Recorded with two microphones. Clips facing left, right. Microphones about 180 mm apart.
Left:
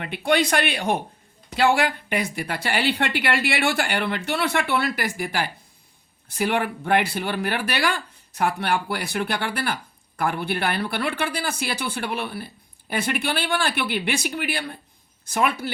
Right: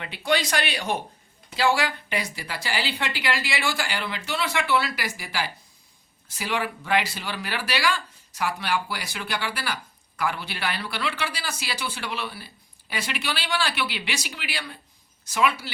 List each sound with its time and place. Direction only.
0.0 s a woman's voice: 55° left (ahead or behind)